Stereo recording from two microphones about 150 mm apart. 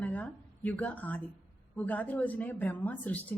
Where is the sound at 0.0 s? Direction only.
10° left (ahead or behind).